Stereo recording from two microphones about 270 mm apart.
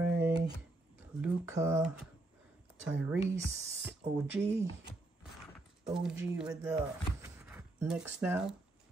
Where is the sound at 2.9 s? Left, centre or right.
Right.